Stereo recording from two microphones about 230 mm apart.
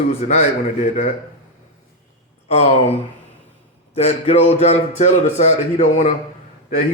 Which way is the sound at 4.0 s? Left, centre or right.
Left.